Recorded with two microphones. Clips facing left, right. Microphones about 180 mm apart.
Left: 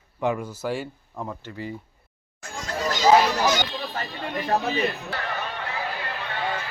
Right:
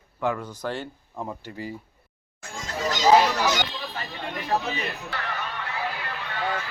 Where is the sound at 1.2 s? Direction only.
10° right (ahead or behind).